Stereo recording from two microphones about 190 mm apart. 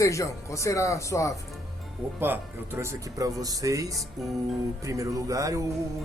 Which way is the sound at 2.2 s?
10° right (ahead or behind).